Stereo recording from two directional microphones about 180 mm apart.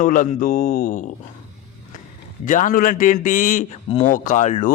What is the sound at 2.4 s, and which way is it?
A man's voice, 50° left (ahead or behind).